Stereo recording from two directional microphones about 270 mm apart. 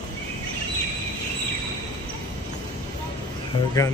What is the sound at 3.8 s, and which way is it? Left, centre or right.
Speech, centre.